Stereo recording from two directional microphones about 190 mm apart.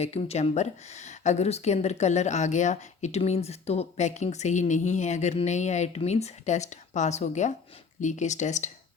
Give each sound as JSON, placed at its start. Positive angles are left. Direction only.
{"t": 0.0, "sound": "speech", "side_deg": 35}